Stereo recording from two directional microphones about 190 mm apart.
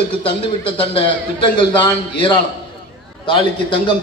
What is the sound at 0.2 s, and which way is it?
A man's voice, 25° left (ahead or behind).